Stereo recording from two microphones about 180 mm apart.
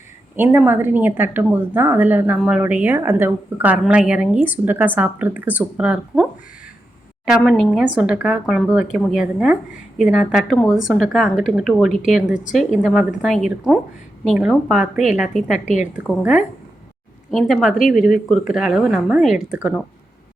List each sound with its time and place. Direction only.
0.3 s a woman's voice: 10° right (ahead or behind)
7.3 s speech: centre (ahead or behind)
15.6 s a woman's voice: 40° left (ahead or behind)
16.0 s a woman's voice: 5° right (ahead or behind)